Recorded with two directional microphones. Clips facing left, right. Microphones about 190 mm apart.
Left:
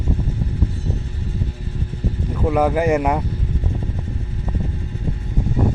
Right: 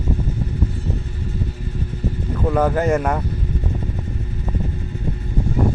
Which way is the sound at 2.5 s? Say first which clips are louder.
Left 1 dB; 10° left (ahead or behind).